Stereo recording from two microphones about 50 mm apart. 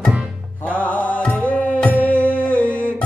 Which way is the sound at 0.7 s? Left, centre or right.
Left.